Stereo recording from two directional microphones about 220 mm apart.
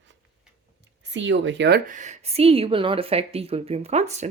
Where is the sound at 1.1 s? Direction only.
55° right (ahead or behind).